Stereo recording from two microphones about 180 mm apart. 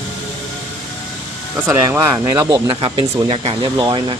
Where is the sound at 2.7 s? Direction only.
30° right (ahead or behind).